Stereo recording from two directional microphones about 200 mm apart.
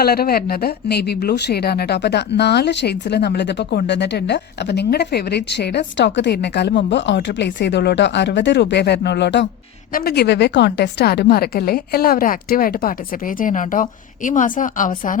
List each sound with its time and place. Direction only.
0.0 s a woman's voice: 50° left (ahead or behind)